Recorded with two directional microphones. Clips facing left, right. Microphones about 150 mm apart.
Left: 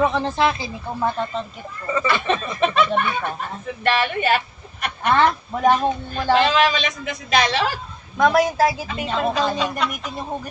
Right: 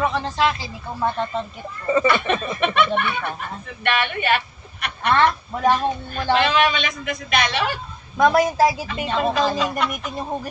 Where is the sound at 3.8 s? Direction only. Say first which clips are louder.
Left 2 dB; 35° left (ahead or behind).